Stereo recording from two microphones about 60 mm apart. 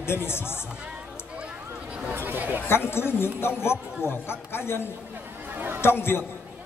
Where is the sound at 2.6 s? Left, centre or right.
Left.